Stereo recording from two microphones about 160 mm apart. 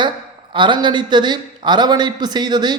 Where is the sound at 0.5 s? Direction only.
30° right (ahead or behind).